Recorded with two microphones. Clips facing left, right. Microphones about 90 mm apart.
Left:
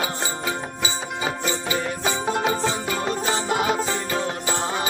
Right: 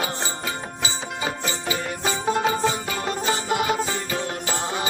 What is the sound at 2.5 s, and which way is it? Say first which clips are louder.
Music: even; 5° right (ahead or behind).